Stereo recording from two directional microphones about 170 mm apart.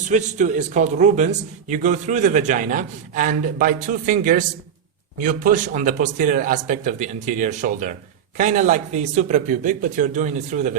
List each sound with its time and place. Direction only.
0.1 s a man's voice: 45° right (ahead or behind)